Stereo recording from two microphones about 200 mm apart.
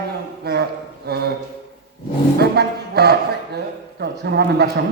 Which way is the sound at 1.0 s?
55° right (ahead or behind).